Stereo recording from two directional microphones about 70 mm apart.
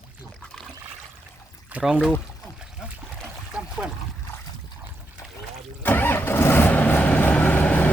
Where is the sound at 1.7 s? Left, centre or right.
Right.